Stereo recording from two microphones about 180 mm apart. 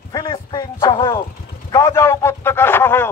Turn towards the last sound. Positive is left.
turn(degrees=10)  # may be behind; listen again after turning